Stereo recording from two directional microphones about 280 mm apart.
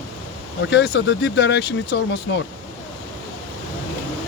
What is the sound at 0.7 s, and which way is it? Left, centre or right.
Speech, left.